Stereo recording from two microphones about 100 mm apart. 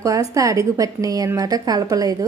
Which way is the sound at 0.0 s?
35° right (ahead or behind).